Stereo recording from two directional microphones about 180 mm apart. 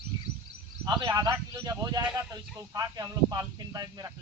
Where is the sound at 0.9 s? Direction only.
20° right (ahead or behind).